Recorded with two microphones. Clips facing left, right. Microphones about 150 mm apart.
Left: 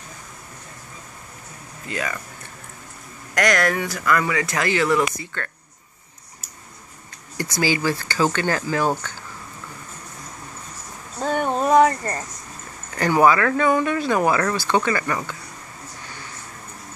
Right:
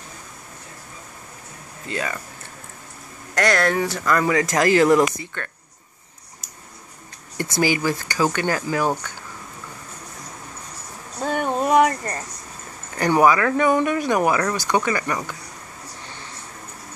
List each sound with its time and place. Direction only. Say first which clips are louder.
1.9 s speech: right 1 dB; 30° right (ahead or behind)
3.3 s speech: right 1 dB; 30° right (ahead or behind)
5.3 s speech: left 1 dB; 20° right (ahead or behind)
7.3 s speech: right 1 dB; 20° right (ahead or behind)
11.3 s a sound: left 1 dB; 20° left (ahead or behind)
12.9 s speech: even; 20° right (ahead or behind)